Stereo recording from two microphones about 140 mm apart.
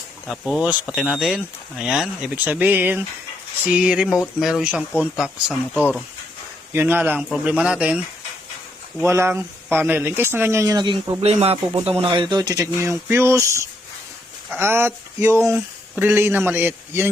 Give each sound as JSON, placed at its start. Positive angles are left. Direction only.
{"t": 0.3, "sound": "speech", "side_deg": 0}
{"t": 9.0, "sound": "speech", "side_deg": -20}
{"t": 11.2, "sound": "speech", "side_deg": -45}